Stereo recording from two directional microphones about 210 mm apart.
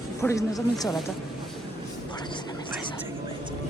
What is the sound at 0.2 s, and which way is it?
Speech, 15° left (ahead or behind).